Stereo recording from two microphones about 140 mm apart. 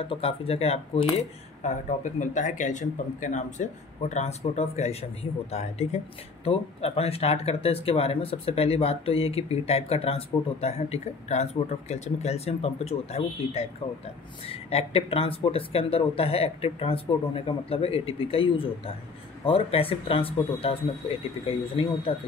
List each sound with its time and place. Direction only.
0.0 s speech: 40° left (ahead or behind)
2.1 s speech: 65° left (ahead or behind); by 22.1 s 45° left (ahead or behind)